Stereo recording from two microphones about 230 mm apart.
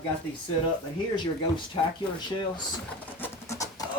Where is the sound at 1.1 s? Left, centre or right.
Centre.